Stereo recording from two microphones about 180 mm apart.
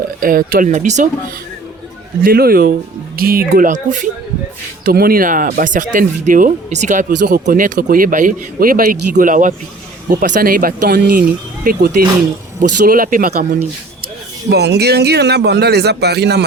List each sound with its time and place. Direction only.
0.2 s speech: 55° right (ahead or behind)
2.2 s speech: 55° right (ahead or behind)
4.9 s speech: 55° right (ahead or behind)
7.2 s speech: 70° right (ahead or behind)
7.4 s speech: 50° right (ahead or behind)
14.5 s speech: 65° right (ahead or behind)